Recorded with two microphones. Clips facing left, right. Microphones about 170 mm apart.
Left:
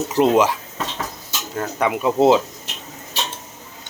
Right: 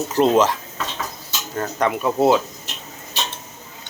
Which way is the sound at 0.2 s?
10° left (ahead or behind).